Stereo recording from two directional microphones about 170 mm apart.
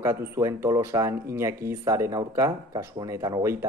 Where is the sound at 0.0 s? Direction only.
15° right (ahead or behind).